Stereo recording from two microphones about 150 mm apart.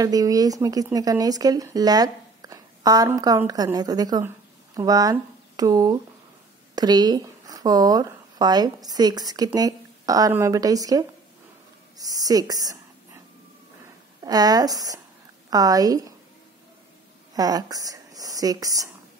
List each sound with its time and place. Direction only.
0.0 s speech: 25° right (ahead or behind)
14.2 s speech: 25° right (ahead or behind)
17.3 s speech: 25° right (ahead or behind)